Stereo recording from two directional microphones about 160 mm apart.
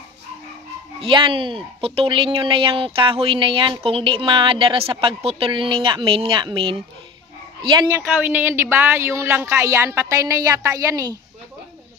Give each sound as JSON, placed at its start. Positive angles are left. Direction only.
{"t": 1.0, "sound": "speech", "side_deg": -35}
{"t": 7.9, "sound": "a woman's voice", "side_deg": -10}